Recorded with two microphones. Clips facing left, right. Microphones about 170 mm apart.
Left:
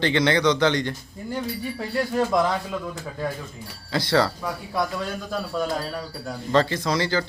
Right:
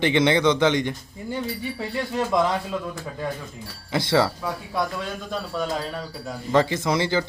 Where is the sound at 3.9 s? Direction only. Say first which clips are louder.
Right 1 dB; 20° right (ahead or behind).